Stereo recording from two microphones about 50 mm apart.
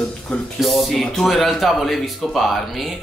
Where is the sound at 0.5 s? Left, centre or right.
Centre.